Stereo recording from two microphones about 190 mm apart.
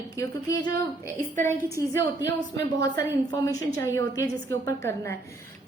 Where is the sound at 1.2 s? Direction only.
40° right (ahead or behind).